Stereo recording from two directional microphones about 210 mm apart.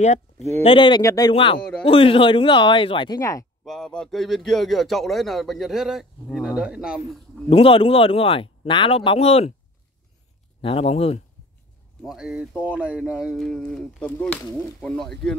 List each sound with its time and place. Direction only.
0.0 s speech: 35° left (ahead or behind)
0.7 s speech: 20° left (ahead or behind)
3.6 s a man's voice: centre (ahead or behind)
7.4 s speech: 25° left (ahead or behind)
10.6 s speech: 30° left (ahead or behind)
12.0 s a man's voice: centre (ahead or behind)